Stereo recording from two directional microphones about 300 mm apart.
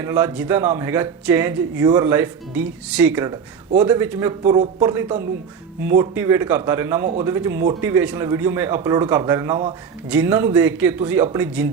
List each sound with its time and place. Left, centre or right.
0.0 s speech: centre